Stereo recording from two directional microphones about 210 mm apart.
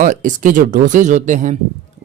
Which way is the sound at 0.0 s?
40° right (ahead or behind).